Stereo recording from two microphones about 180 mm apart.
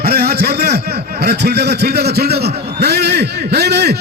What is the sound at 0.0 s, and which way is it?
A man's voice, 60° right (ahead or behind).